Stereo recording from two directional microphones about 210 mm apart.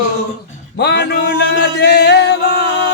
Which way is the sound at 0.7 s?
50° left (ahead or behind).